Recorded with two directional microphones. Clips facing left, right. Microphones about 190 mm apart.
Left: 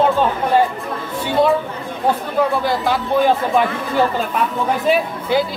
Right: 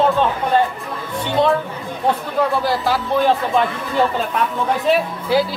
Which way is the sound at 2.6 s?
Centre (ahead or behind).